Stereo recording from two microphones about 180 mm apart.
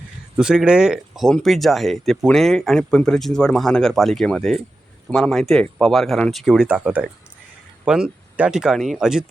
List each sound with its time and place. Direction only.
0.3 s speech: 5° right (ahead or behind)